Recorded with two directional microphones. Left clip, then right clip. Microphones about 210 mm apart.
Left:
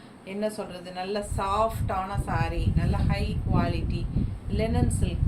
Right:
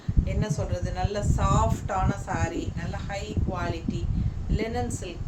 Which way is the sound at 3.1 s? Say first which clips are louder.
Left 1 dB; 15° right (ahead or behind).